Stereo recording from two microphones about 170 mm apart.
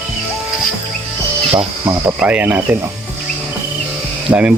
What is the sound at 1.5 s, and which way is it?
Speech, 30° right (ahead or behind).